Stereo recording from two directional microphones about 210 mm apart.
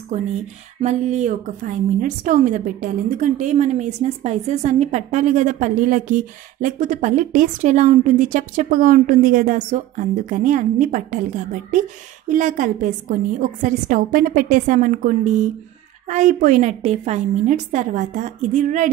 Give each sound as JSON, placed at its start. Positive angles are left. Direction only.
{"t": 0.7, "sound": "a woman's voice", "side_deg": -35}